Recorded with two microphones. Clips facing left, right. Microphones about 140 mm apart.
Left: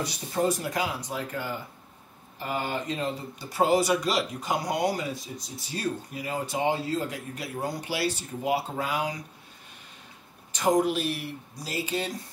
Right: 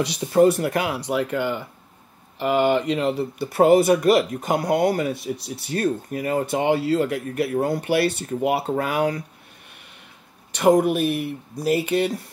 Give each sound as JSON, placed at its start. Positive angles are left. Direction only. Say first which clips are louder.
{"t": 0.0, "sound": "speech", "louder": "right 10 dB", "side_deg": -80}
{"t": 10.5, "sound": "speech", "louder": "right 6 dB", "side_deg": -60}